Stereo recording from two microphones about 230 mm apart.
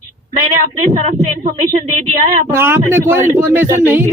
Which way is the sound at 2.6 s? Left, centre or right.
Centre.